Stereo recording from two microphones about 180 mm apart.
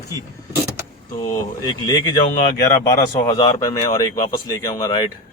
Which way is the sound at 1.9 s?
25° left (ahead or behind).